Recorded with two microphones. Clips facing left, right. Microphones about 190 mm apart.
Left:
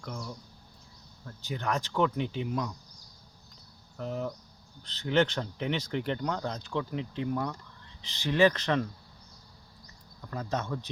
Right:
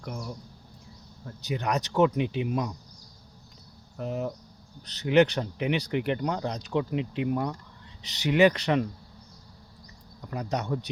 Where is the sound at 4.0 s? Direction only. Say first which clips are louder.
Right 3 dB; 15° right (ahead or behind).